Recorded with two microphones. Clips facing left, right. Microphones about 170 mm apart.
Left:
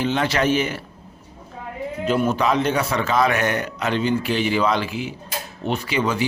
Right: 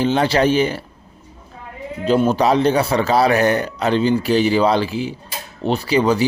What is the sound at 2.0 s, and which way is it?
Speech, 30° right (ahead or behind).